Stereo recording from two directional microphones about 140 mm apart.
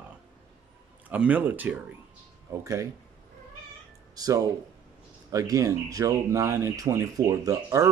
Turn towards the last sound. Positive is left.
turn(degrees=-25)  # may be behind; listen again after turning